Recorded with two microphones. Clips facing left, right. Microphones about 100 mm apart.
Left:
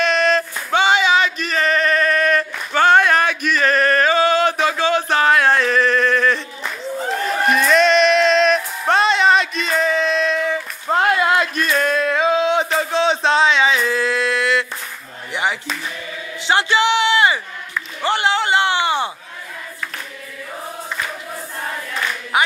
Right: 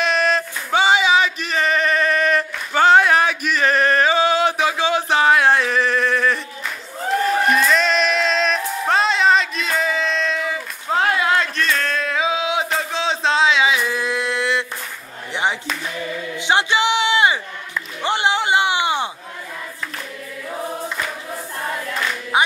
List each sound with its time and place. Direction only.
0.0 s male singing: 10° right (ahead or behind)
7.5 s music: centre (ahead or behind); by 14.7 s 20° right (ahead or behind)
16.3 s a sound: 20° right (ahead or behind)
22.3 s music: 20° right (ahead or behind)